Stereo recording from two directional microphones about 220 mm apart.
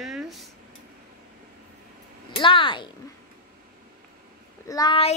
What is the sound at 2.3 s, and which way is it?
Speech, 25° left (ahead or behind).